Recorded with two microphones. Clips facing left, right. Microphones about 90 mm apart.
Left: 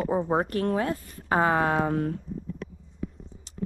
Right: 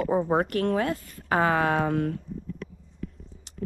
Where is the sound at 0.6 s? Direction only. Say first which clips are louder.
Right 1 dB; 65° right (ahead or behind).